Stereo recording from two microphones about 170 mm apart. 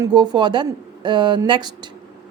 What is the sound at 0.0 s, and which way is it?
A woman's voice, 25° right (ahead or behind).